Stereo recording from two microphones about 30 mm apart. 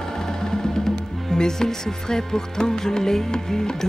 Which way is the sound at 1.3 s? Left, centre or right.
Left.